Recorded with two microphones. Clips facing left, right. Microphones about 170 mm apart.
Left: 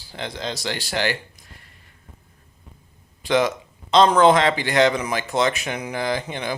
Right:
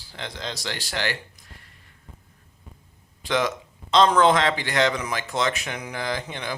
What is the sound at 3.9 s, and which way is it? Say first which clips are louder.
Speech: left 3 dB; 15° left (ahead or behind).